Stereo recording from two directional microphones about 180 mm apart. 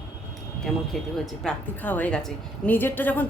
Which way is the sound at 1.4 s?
10° left (ahead or behind).